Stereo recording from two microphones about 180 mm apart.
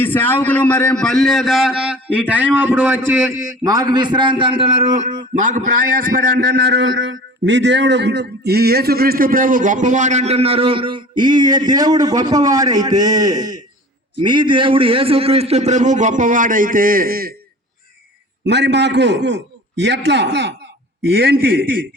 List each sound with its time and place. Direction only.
0.0 s a man's voice: 10° left (ahead or behind); by 17.3 s 55° right (ahead or behind)
18.4 s a man's voice: 70° right (ahead or behind)
21.2 s a man's voice: 55° right (ahead or behind)